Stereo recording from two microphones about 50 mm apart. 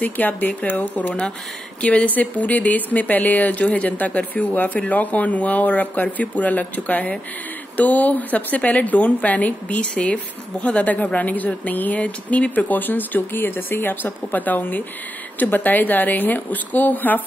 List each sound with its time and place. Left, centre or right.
0.0 s a woman's voice: left